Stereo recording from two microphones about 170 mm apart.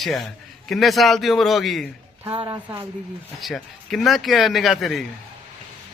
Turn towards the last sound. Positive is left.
turn(degrees=0)  # may be behind; listen again after turning